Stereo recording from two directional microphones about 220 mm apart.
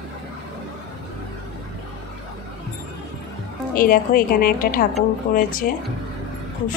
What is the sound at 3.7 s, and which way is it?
A woman's voice, 40° left (ahead or behind).